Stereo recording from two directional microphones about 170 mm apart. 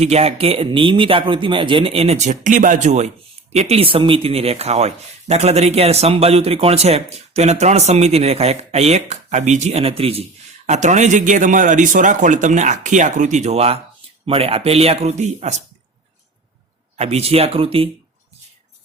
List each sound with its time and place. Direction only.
0.0 s a man's voice: 40° right (ahead or behind)
17.0 s speech: 40° right (ahead or behind)